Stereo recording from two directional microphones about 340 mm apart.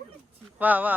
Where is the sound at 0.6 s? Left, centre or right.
Centre.